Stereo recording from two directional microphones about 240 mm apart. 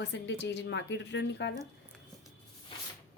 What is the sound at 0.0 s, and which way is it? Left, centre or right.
Speech, left.